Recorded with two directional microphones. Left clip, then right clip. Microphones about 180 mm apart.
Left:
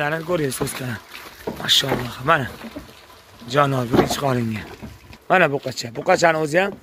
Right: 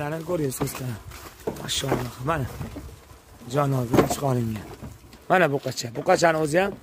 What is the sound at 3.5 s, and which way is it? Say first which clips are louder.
Speech: left 6 dB; 5° right (ahead or behind).